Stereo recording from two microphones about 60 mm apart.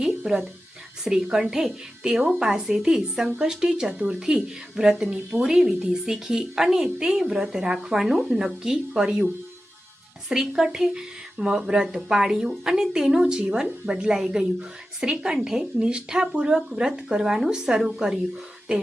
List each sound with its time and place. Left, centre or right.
1.0 s speech: centre
2.2 s speech: centre
10.2 s speech: centre